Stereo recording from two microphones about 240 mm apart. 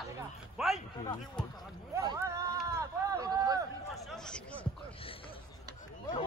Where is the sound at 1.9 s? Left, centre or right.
Centre.